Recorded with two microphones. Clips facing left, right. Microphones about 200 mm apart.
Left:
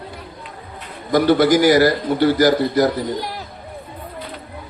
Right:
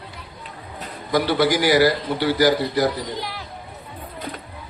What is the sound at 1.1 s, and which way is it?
A man's voice, 45° left (ahead or behind).